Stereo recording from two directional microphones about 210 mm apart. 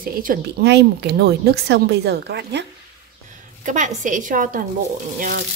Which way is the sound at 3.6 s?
35° right (ahead or behind).